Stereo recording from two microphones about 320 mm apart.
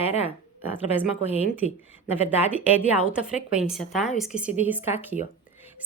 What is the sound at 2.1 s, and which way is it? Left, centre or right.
A woman's voice, centre.